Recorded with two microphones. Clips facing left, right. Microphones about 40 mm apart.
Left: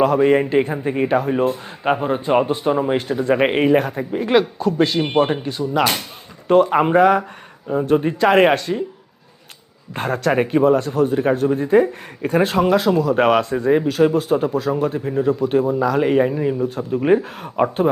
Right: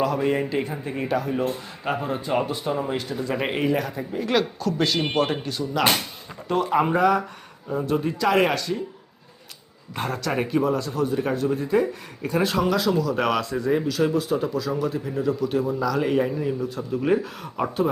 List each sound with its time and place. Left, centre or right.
0.0 s speech: left
4.3 s speech: left
6.5 s speech: left
9.9 s speech: left